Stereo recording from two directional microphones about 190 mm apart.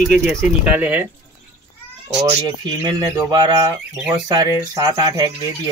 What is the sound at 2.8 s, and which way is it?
Speech, 20° right (ahead or behind).